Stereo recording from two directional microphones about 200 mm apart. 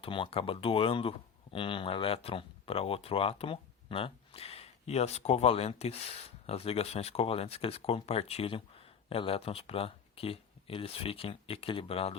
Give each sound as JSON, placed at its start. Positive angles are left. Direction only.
{"t": 0.0, "sound": "speech", "side_deg": 25}